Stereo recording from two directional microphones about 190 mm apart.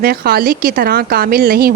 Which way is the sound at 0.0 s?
55° right (ahead or behind).